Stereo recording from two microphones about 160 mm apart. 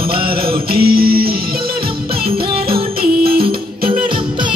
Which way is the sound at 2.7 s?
70° right (ahead or behind).